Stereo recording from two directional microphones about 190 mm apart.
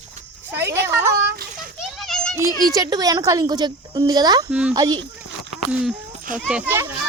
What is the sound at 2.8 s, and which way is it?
Speech, 20° right (ahead or behind).